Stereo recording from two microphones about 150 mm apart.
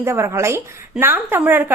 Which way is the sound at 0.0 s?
20° right (ahead or behind).